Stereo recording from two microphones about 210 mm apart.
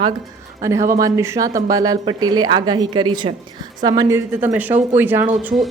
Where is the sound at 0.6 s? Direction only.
15° right (ahead or behind).